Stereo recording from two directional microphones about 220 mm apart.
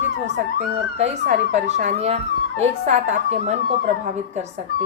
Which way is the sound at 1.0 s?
30° right (ahead or behind).